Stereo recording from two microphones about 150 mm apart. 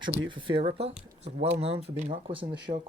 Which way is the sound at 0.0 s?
35° right (ahead or behind).